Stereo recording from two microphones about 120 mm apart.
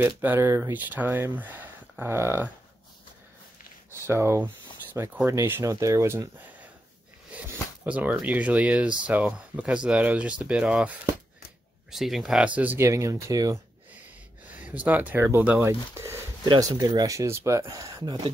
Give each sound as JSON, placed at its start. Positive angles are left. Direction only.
{"t": 0.0, "sound": "speech", "side_deg": -15}
{"t": 3.9, "sound": "speech", "side_deg": -20}
{"t": 7.8, "sound": "speech", "side_deg": -10}
{"t": 11.9, "sound": "speech", "side_deg": 0}
{"t": 12.7, "sound": "speech", "side_deg": -25}
{"t": 14.6, "sound": "speech", "side_deg": -15}